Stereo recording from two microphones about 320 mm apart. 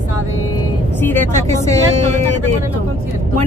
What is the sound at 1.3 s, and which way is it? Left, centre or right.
Speech, right.